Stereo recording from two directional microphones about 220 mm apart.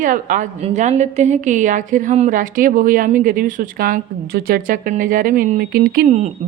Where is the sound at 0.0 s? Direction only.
35° right (ahead or behind).